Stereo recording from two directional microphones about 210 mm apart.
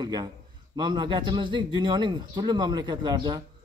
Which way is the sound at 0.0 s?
20° right (ahead or behind).